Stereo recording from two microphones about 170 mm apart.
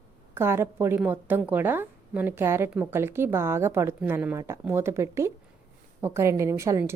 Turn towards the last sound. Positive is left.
turn(degrees=-15)  # may be behind; listen again after turning